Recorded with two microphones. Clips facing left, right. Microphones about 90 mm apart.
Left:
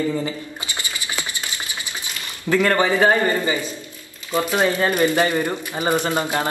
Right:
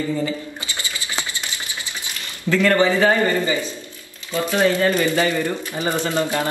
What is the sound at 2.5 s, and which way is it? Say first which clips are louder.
Speech: right 1 dB; 20° left (ahead or behind).